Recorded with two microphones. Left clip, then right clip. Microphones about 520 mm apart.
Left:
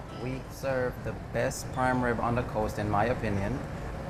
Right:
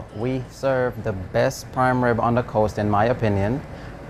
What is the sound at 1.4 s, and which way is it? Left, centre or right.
Speech, right.